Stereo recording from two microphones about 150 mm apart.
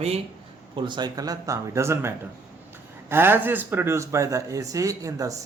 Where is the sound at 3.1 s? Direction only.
15° right (ahead or behind).